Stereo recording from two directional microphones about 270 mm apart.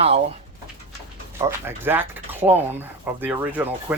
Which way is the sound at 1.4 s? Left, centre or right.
Centre.